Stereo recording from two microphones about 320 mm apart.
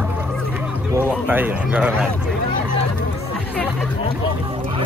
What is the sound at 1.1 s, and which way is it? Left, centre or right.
Speech, centre.